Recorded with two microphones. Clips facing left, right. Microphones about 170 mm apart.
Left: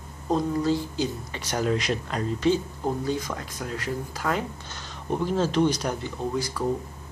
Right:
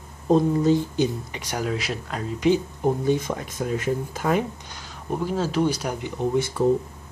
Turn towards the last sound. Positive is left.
turn(degrees=-25)  # may be behind; listen again after turning